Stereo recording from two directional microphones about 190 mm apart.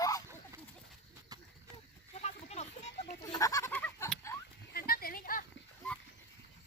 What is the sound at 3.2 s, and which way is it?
Goat, 20° left (ahead or behind).